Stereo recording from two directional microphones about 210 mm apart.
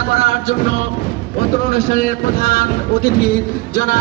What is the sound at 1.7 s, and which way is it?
A man's voice, 40° left (ahead or behind).